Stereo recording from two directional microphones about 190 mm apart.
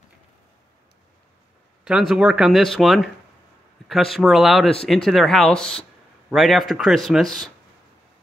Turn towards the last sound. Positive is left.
turn(degrees=0)  # may be behind; listen again after turning